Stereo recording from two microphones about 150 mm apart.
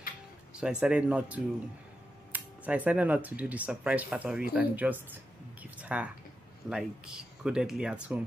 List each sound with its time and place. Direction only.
0.6 s speech: 5° right (ahead or behind)
5.6 s a sound: 10° right (ahead or behind)
6.7 s speech: 5° right (ahead or behind)